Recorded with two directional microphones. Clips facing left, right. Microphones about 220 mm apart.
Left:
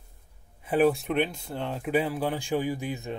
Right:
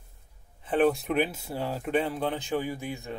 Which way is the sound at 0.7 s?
5° left (ahead or behind).